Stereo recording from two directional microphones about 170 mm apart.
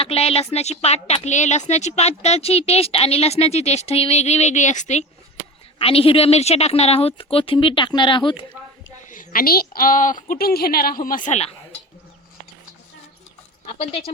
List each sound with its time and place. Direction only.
0.0 s a woman's voice: 35° left (ahead or behind)
9.0 s a woman's voice: 55° left (ahead or behind)